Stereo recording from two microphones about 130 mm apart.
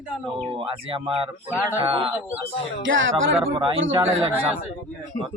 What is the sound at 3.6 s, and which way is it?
Speech, 45° right (ahead or behind).